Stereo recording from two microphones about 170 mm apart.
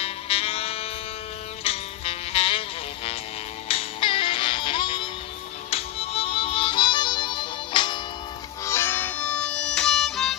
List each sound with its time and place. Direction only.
0.0 s music: 35° left (ahead or behind)
8.6 s music: 15° left (ahead or behind)